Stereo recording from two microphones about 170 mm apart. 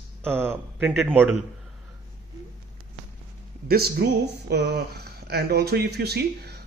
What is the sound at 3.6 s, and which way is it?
Speech, 65° right (ahead or behind).